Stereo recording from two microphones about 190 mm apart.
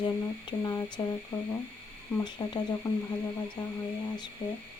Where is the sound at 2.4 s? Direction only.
25° left (ahead or behind).